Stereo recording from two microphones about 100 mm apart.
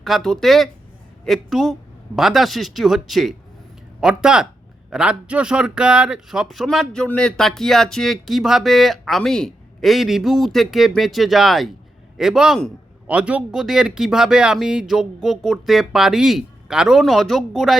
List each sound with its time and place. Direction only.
0.0 s a man's voice: centre (ahead or behind)